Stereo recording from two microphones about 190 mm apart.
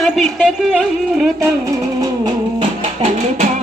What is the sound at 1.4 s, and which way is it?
Music, 20° right (ahead or behind).